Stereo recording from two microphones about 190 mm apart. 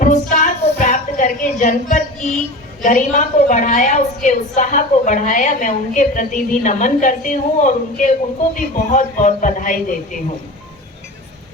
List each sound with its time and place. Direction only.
0.0 s child singing: 40° left (ahead or behind)
2.8 s a woman's voice: 40° left (ahead or behind)